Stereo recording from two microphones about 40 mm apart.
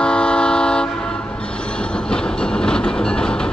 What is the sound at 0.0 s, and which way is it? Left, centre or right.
Train, left.